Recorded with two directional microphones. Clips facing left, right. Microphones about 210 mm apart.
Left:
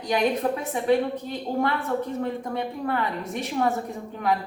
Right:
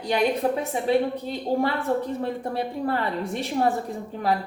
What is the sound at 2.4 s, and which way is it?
Speech, 30° right (ahead or behind).